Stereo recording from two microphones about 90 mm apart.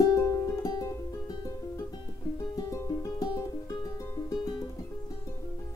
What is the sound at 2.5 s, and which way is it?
Music, 40° left (ahead or behind).